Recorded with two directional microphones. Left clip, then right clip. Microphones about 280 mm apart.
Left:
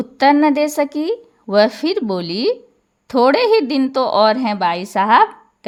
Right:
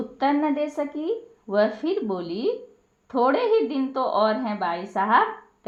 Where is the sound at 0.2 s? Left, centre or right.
Left.